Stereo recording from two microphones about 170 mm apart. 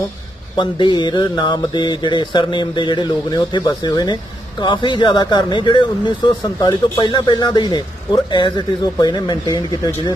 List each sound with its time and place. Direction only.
0.6 s speech: 25° left (ahead or behind)